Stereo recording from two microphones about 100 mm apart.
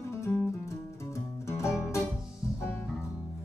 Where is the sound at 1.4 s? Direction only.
30° left (ahead or behind).